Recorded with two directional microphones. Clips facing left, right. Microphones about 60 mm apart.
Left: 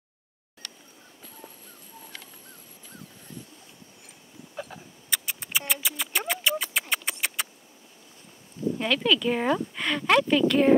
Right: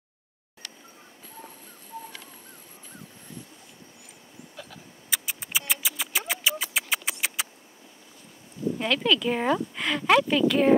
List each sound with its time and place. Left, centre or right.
4.6 s vehicle: left
5.1 s a sound: centre
8.7 s speech: centre